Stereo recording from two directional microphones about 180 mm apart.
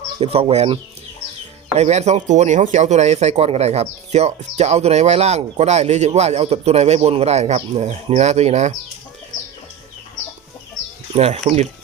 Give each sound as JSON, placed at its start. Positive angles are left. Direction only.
{"t": 0.2, "sound": "speech", "side_deg": -35}
{"t": 1.8, "sound": "speech", "side_deg": -40}
{"t": 11.1, "sound": "speech", "side_deg": -35}